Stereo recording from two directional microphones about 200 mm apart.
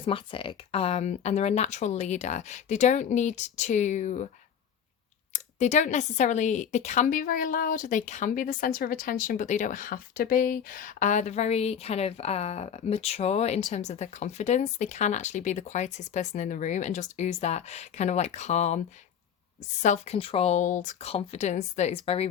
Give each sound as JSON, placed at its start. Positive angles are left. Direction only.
{"t": 0.0, "sound": "speech", "side_deg": 25}
{"t": 5.3, "sound": "speech", "side_deg": 35}
{"t": 19.8, "sound": "speech", "side_deg": 35}